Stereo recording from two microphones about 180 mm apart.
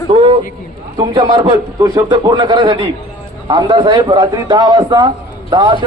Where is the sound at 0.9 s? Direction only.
25° right (ahead or behind).